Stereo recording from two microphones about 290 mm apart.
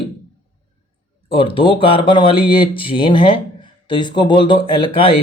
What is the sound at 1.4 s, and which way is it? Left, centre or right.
Speech, centre.